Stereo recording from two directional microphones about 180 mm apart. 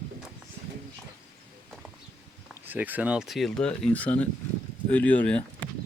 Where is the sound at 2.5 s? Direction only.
10° right (ahead or behind); by 5.4 s 5° left (ahead or behind).